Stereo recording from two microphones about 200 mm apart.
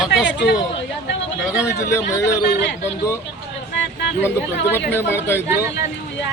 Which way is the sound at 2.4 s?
55° left (ahead or behind).